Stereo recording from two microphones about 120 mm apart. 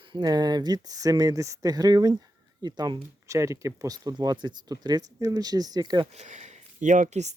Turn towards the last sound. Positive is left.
turn(degrees=-70)  # may be behind; listen again after turning